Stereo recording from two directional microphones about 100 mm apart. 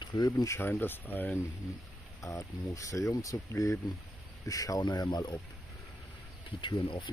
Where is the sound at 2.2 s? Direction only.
35° left (ahead or behind).